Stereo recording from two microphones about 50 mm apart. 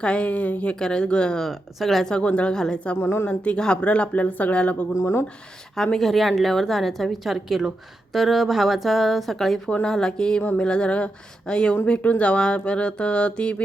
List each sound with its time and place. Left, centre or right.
0.0 s speech: left
0.8 s speech: centre
1.5 s speech: centre
2.0 s speech: left
3.0 s speech: left
3.2 s speech: left
4.9 s speech: left
5.7 s speech: centre
9.8 s speech: centre